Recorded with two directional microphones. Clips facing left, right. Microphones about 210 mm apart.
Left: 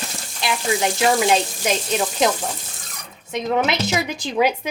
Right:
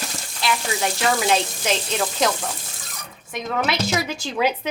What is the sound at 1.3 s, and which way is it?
Speech, 10° left (ahead or behind).